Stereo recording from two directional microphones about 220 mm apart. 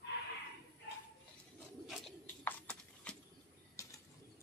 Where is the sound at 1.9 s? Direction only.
5° left (ahead or behind).